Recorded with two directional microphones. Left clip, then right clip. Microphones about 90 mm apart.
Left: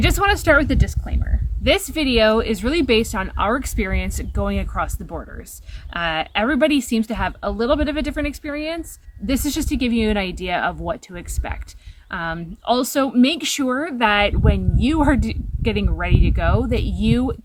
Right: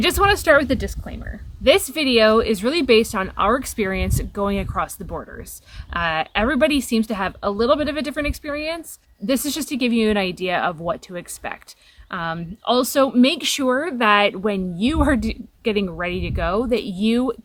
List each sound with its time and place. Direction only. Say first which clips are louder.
0.0 s speech: right 1 dB; 35° right (ahead or behind)